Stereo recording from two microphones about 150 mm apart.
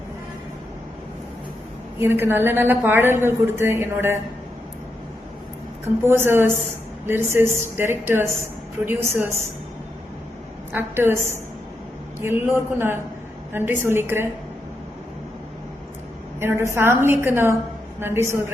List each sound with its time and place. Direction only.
2.0 s a woman's voice: 15° right (ahead or behind)
6.0 s a woman's voice: 15° right (ahead or behind)
10.7 s a woman's voice: 15° right (ahead or behind)
12.2 s a woman's voice: 15° right (ahead or behind)
16.4 s a woman's voice: 15° right (ahead or behind)